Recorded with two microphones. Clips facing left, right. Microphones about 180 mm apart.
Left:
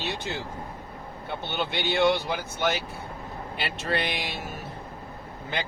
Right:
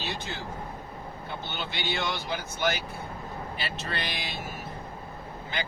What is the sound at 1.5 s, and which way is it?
Speech, 60° left (ahead or behind).